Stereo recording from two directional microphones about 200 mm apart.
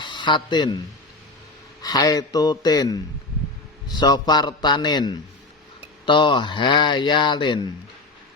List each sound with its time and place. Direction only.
0.0 s speech: 25° left (ahead or behind)
1.8 s speech: 20° left (ahead or behind)